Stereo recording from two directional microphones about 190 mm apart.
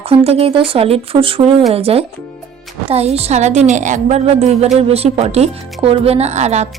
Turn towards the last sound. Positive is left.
turn(degrees=-35)  # may be behind; listen again after turning